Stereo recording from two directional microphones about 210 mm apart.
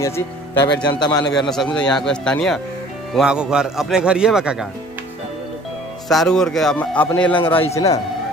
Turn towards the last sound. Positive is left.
turn(degrees=15)  # may be behind; listen again after turning